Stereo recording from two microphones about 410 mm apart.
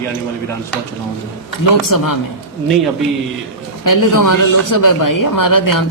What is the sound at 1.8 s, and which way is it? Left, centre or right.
Speech, left.